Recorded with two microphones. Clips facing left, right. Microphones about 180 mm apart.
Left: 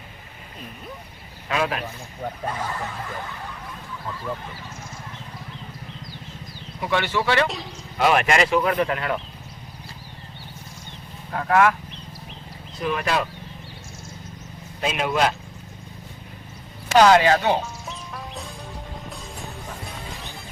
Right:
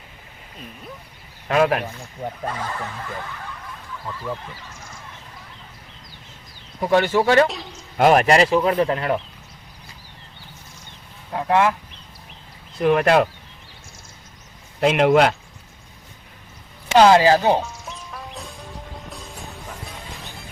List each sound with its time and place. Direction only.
1.5 s speech: 50° right (ahead or behind)
2.2 s speech: 15° right (ahead or behind)
6.8 s speech: 45° right (ahead or behind)
7.4 s speech: centre (ahead or behind)
7.9 s speech: 45° right (ahead or behind)
11.3 s speech: 20° right (ahead or behind)
12.8 s speech: 60° right (ahead or behind)
14.8 s speech: 65° right (ahead or behind)
16.9 s speech: 25° right (ahead or behind)
17.8 s music: centre (ahead or behind)